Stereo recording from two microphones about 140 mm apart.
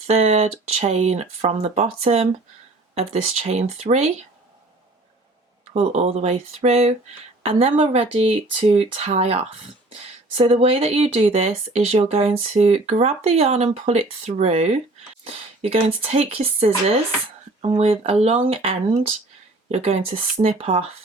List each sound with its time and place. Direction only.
0.1 s speech: 50° right (ahead or behind)
5.7 s speech: 50° right (ahead or behind)
15.2 s a sound: 45° right (ahead or behind)
16.0 s speech: 45° right (ahead or behind)